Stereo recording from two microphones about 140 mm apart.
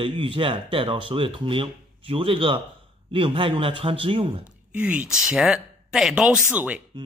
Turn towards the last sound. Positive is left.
turn(degrees=-15)  # may be behind; listen again after turning